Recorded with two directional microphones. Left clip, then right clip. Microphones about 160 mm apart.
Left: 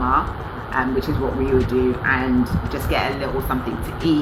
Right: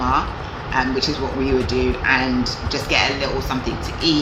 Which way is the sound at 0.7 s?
25° right (ahead or behind).